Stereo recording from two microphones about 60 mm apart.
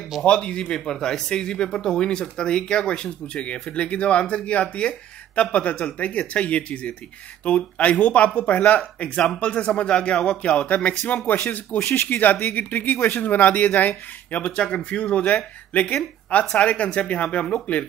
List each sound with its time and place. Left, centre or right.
0.2 s speech: centre
10.7 s speech: left